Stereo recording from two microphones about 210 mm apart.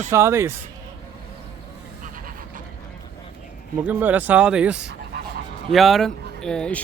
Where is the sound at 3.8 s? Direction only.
10° right (ahead or behind).